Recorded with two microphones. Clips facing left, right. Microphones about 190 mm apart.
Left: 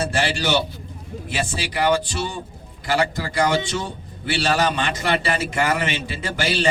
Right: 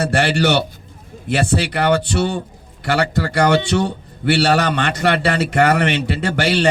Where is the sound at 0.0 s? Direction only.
65° right (ahead or behind).